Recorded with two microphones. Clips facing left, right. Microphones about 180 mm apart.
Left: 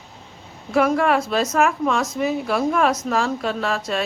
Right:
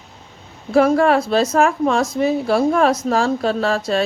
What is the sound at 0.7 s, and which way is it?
Speech, 35° right (ahead or behind).